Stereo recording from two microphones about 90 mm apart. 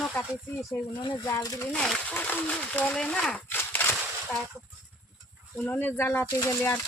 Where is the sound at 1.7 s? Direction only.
10° left (ahead or behind).